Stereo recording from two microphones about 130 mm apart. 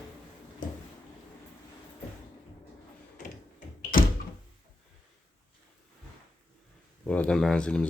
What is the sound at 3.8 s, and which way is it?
Door, 90° left.